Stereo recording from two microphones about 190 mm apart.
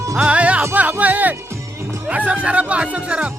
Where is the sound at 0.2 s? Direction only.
5° right (ahead or behind).